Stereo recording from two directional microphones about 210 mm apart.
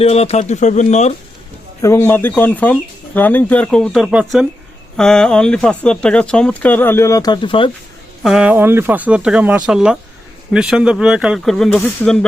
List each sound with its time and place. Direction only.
0.0 s speech: 30° left (ahead or behind)
1.8 s speech: 10° left (ahead or behind)
8.2 s speech: 5° right (ahead or behind)